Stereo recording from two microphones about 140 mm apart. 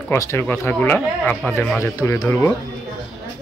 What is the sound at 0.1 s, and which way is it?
Speech, 20° left (ahead or behind).